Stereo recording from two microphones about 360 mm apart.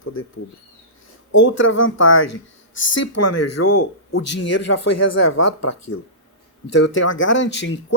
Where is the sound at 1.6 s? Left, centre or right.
Left.